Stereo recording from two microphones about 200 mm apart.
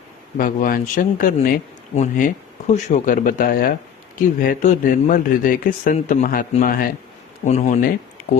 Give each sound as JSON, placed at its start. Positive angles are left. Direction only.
{"t": 0.3, "sound": "speech", "side_deg": 45}
{"t": 7.4, "sound": "speech", "side_deg": 35}